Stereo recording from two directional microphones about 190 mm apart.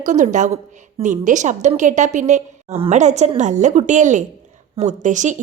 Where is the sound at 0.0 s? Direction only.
40° right (ahead or behind).